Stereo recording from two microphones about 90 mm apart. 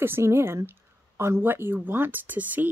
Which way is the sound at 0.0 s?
25° right (ahead or behind).